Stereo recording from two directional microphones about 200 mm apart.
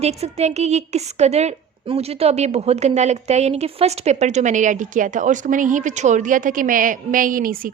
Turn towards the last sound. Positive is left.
turn(degrees=-45)  # may be behind; listen again after turning